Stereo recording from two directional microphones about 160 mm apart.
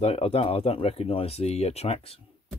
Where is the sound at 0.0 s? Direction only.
40° left (ahead or behind).